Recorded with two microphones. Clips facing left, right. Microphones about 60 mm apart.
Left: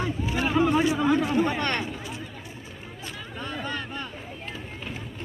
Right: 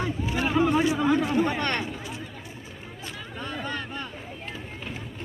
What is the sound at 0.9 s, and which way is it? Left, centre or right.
Chatter, centre.